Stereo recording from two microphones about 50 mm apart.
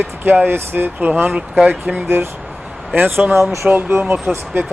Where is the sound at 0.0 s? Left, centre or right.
Right.